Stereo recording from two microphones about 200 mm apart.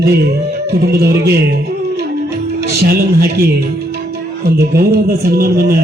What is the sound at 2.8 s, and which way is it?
Speech, 50° right (ahead or behind).